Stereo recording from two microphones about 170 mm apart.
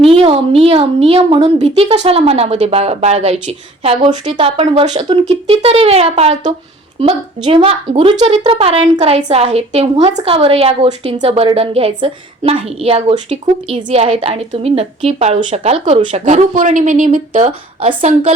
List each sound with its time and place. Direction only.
0.0 s a woman's voice: 35° right (ahead or behind)